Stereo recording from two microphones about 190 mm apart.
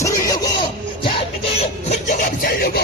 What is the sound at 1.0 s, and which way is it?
Music, 30° left (ahead or behind).